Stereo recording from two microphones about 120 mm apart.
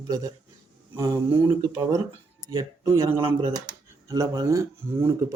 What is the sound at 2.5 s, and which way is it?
Speech, 30° right (ahead or behind).